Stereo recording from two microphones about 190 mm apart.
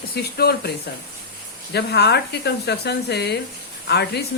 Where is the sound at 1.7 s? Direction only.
60° left (ahead or behind).